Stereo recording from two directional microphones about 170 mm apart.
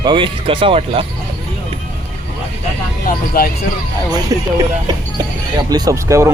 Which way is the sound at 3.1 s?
60° left (ahead or behind).